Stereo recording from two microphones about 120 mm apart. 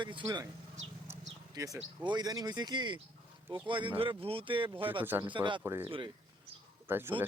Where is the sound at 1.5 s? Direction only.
25° right (ahead or behind); by 6.1 s 45° right (ahead or behind).